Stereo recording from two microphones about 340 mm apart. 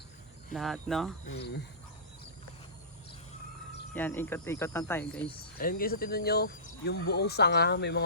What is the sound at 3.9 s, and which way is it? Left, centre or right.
Speech, centre.